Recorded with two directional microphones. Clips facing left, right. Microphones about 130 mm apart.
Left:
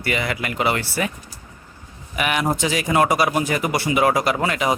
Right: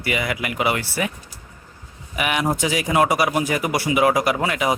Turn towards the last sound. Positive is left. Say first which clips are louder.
# even
turn(degrees=-10)  # may be behind; listen again after turning